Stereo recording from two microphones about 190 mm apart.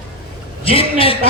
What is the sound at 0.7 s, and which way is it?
Speech, 30° left (ahead or behind).